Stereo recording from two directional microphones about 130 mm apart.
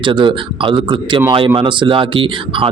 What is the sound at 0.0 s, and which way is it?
A man's voice, 40° right (ahead or behind).